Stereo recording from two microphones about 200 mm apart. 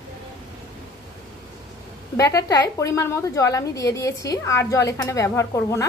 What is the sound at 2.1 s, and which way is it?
A woman's voice, 15° left (ahead or behind).